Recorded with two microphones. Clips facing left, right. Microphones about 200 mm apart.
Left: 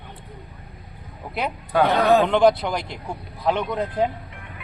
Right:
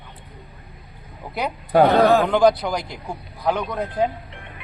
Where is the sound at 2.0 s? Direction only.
20° left (ahead or behind).